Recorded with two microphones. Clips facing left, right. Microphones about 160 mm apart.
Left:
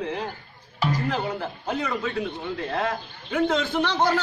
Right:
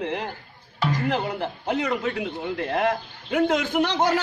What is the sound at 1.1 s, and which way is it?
Speech, 20° right (ahead or behind).